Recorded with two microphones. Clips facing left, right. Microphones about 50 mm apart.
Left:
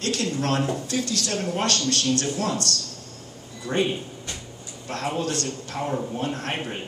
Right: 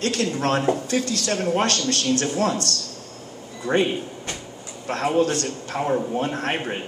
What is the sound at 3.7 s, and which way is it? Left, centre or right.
Speech, right.